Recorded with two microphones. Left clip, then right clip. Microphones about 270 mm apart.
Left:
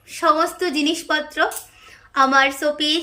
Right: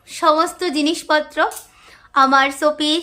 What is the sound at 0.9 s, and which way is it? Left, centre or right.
A woman's voice, centre.